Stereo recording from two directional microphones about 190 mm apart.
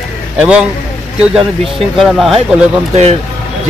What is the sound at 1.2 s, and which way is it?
Speech, centre (ahead or behind).